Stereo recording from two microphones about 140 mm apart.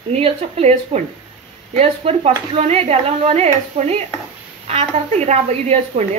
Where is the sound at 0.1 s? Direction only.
50° right (ahead or behind).